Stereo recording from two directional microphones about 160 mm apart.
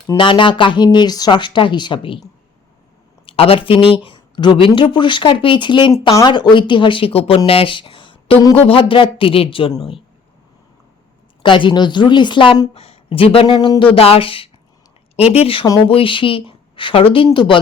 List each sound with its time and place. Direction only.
0.2 s speech: 30° left (ahead or behind)
3.2 s speech: 35° left (ahead or behind)
11.4 s speech: 30° left (ahead or behind)